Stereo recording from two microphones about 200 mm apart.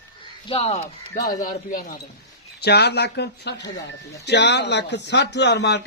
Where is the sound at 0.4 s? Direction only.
30° left (ahead or behind).